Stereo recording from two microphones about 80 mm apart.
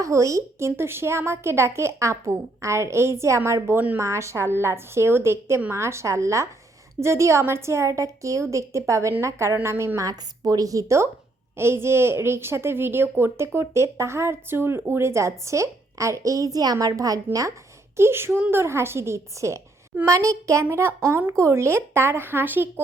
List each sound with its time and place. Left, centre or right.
0.0 s a woman's voice: right
10.1 s a woman's voice: right
17.9 s a woman's voice: right